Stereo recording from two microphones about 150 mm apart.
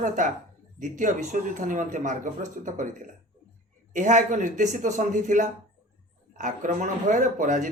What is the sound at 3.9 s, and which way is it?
Speech, 55° right (ahead or behind).